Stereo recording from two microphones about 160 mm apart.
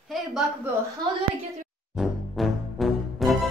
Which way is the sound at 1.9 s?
Centre (ahead or behind).